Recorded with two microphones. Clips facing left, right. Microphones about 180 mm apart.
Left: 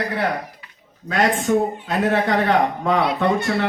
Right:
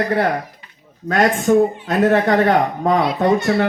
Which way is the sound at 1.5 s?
45° right (ahead or behind).